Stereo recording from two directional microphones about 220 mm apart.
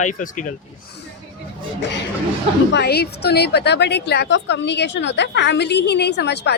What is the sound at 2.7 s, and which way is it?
A woman's voice, 50° left (ahead or behind).